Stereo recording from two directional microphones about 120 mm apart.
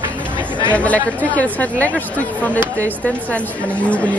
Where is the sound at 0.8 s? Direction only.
10° left (ahead or behind).